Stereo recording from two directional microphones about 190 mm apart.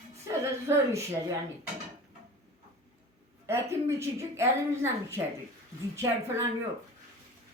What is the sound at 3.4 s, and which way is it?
A woman's voice, 15° right (ahead or behind).